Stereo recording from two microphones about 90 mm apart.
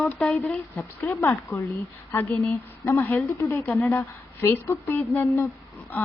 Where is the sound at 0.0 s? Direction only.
15° left (ahead or behind).